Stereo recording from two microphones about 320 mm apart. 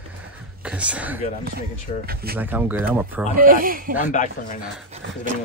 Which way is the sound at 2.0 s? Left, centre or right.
Right.